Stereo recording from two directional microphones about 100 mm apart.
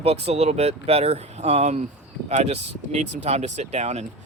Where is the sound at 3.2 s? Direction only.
90° right.